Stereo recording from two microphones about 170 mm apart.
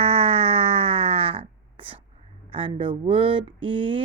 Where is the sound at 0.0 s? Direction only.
35° right (ahead or behind).